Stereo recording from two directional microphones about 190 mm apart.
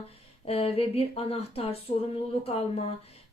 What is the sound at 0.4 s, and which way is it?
Speech, 30° left (ahead or behind).